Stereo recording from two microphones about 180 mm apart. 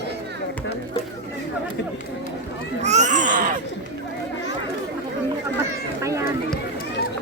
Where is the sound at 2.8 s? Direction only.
40° right (ahead or behind).